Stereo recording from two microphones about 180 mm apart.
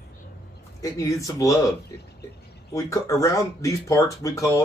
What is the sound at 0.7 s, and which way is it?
Speech, 20° left (ahead or behind).